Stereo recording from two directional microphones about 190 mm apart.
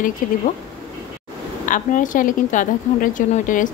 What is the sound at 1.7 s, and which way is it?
Speech, 45° left (ahead or behind).